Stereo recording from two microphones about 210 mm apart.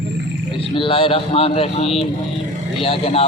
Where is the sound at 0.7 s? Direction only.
25° left (ahead or behind).